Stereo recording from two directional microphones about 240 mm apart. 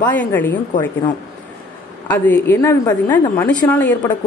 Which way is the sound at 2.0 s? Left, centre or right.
Centre.